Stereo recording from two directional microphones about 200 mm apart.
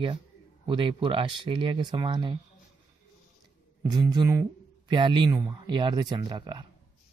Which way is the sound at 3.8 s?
20° right (ahead or behind).